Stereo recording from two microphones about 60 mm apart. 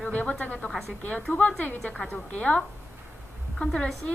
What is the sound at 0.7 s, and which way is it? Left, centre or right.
A woman's voice, centre.